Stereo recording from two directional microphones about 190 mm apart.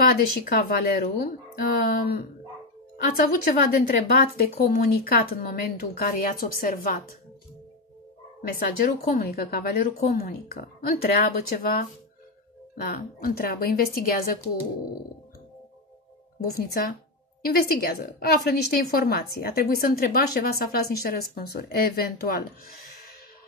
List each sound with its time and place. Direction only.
0.1 s a woman's voice: 50° left (ahead or behind)
8.4 s a woman's voice: 50° left (ahead or behind)
12.8 s a woman's voice: 50° left (ahead or behind)
16.4 s a woman's voice: 55° left (ahead or behind)
22.8 s a sound: 50° left (ahead or behind)